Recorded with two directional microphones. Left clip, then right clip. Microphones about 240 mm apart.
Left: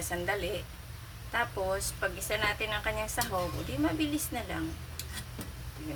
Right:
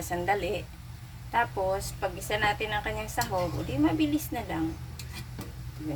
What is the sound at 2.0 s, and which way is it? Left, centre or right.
A woman's voice, centre.